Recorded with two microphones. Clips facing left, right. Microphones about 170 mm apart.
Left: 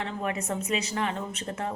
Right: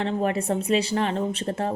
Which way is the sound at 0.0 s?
30° right (ahead or behind).